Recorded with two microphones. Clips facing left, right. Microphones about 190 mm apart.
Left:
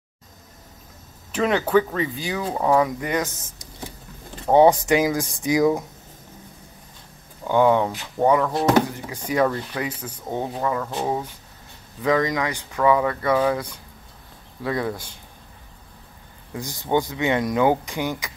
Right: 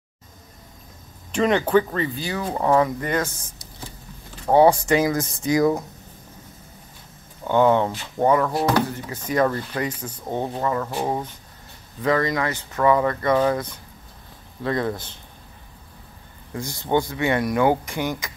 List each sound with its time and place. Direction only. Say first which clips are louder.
1.3 s speech: right 1 dB; 5° left (ahead or behind)
3.1 s speech: even; 15° left (ahead or behind)
7.4 s speech: even; 5° left (ahead or behind)
8.6 s speech: left 2 dB; 20° left (ahead or behind)
9.2 s speech: even; 10° left (ahead or behind); by 11.1 s 5° right (ahead or behind)
12.0 s speech: even; 15° left (ahead or behind)
16.5 s speech: even; 15° left (ahead or behind)